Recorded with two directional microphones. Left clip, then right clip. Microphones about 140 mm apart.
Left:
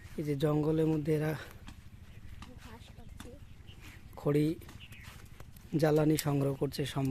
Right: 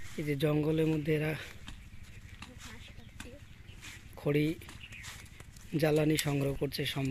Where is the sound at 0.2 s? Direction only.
10° left (ahead or behind).